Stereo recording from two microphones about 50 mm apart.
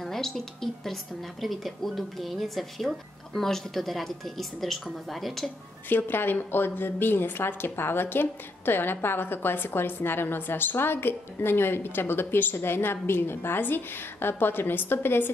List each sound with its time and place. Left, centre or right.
0.0 s a woman's voice: centre
5.9 s a woman's voice: left